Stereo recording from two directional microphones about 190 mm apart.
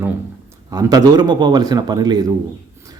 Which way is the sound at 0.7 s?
20° right (ahead or behind).